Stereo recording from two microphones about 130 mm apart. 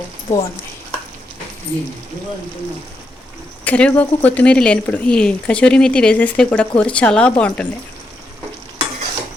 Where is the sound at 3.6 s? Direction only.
10° left (ahead or behind).